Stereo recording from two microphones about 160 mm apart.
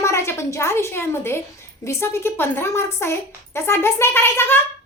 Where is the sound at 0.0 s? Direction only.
15° left (ahead or behind).